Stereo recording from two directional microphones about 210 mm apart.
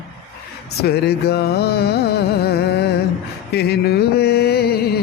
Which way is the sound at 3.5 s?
50° left (ahead or behind).